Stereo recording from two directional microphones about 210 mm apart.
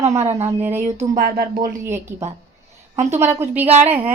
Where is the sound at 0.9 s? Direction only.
45° right (ahead or behind).